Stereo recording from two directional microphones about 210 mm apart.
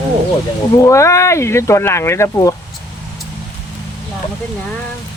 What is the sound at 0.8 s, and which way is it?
Speech, 15° left (ahead or behind).